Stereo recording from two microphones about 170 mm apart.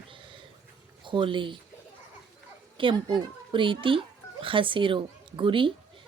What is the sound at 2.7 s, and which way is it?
A woman's voice, 30° right (ahead or behind).